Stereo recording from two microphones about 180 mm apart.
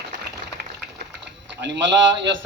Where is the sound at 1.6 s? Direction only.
80° right.